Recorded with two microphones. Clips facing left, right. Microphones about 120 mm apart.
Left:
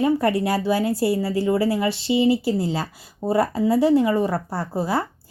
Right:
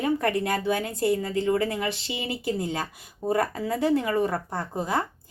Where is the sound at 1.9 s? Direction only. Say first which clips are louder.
Left 13 dB; 30° left (ahead or behind).